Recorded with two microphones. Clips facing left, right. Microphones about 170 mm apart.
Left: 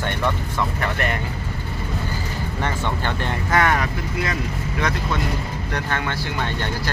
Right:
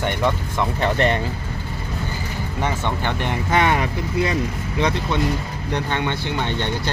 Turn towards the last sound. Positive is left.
turn(degrees=-20)  # may be behind; listen again after turning